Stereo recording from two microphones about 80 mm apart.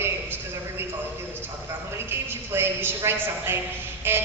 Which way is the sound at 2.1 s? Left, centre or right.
Right.